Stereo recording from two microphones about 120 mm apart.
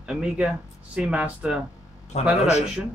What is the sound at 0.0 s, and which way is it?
Speech, 5° right (ahead or behind).